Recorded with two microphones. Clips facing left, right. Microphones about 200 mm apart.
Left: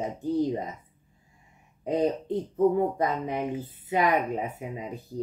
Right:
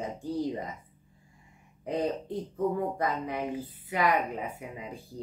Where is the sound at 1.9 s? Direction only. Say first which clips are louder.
Left 5 dB; 25° left (ahead or behind).